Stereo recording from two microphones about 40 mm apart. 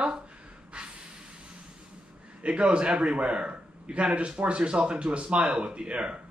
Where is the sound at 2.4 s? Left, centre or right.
Right.